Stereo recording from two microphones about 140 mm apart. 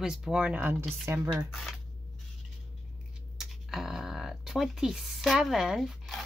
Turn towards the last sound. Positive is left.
turn(degrees=0)  # may be behind; listen again after turning